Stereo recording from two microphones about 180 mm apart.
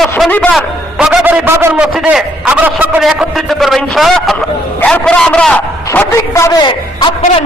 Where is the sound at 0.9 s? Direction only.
5° right (ahead or behind); by 7.1 s 25° left (ahead or behind).